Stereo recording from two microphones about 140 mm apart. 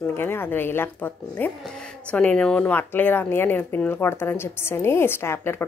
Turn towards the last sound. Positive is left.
turn(degrees=15)  # may be behind; listen again after turning